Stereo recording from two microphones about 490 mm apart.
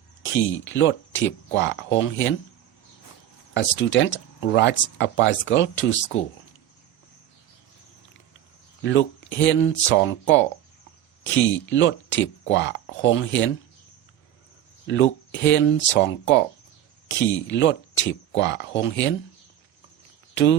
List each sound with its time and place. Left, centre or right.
0.3 s speech: left
3.5 s speech: left
8.8 s speech: left
14.8 s speech: left
17.4 s speech: left
20.3 s speech: left